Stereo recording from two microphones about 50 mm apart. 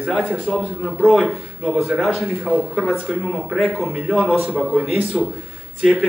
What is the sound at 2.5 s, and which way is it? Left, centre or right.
Speech, centre.